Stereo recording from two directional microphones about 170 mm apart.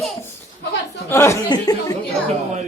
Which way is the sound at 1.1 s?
15° left (ahead or behind).